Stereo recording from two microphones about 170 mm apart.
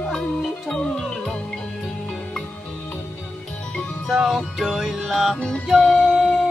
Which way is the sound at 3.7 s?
Centre (ahead or behind).